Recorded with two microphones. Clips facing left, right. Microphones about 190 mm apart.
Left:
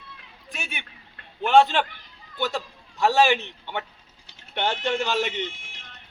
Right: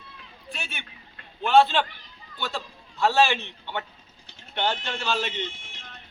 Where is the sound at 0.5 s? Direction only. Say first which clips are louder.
Left 2 dB; 15° left (ahead or behind).